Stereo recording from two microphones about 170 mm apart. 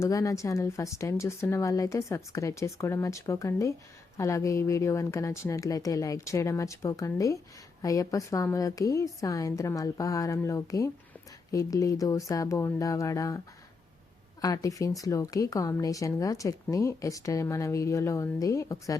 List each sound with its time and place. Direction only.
0.0 s speech: 20° left (ahead or behind)
14.4 s speech: 20° left (ahead or behind)